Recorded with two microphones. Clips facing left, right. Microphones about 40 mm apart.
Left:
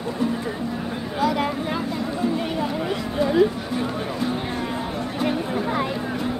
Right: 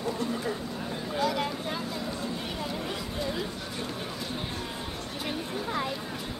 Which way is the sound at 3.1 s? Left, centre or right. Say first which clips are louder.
Left 17 dB; left.